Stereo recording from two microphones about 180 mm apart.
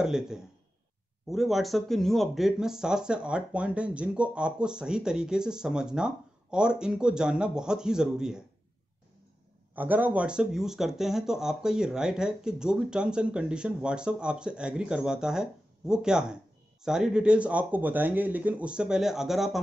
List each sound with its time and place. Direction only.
0.0 s speech: centre (ahead or behind)
9.8 s speech: 10° right (ahead or behind)